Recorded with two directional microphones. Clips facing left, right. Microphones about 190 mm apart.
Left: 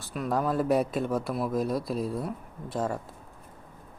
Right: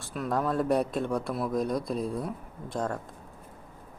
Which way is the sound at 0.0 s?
Centre (ahead or behind).